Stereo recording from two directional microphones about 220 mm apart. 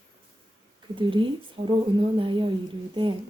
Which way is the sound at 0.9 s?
20° right (ahead or behind).